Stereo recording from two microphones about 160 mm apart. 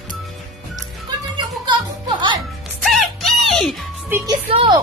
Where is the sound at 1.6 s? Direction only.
30° right (ahead or behind).